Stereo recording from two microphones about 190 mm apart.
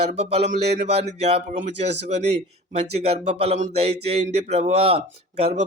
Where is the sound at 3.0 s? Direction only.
35° right (ahead or behind).